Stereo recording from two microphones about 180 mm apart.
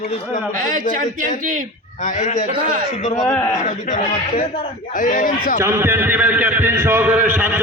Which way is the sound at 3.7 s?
45° left (ahead or behind).